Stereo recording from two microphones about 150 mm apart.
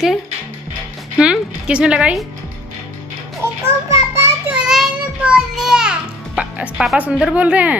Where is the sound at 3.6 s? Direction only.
20° right (ahead or behind).